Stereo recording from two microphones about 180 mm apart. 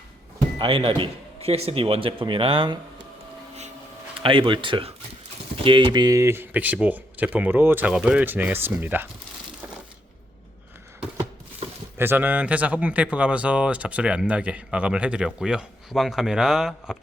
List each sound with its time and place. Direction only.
0.6 s a man's voice: 30° right (ahead or behind)
4.2 s a man's voice: 30° right (ahead or behind); by 9.0 s 10° right (ahead or behind)
11.9 s speech: 10° right (ahead or behind)